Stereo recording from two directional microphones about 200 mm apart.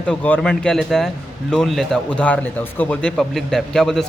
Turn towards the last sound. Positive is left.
turn(degrees=0)  # may be behind; listen again after turning